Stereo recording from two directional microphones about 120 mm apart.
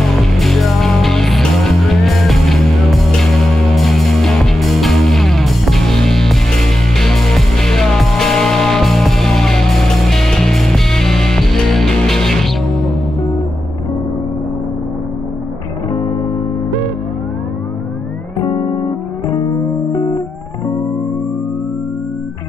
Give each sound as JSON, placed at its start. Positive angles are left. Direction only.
{"t": 0.1, "sound": "music", "side_deg": 0}
{"t": 18.4, "sound": "music", "side_deg": 30}